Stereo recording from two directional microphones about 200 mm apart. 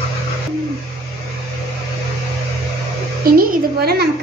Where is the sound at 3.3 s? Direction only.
50° right (ahead or behind).